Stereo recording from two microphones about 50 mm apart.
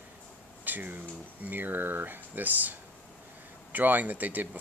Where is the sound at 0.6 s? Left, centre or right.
Right.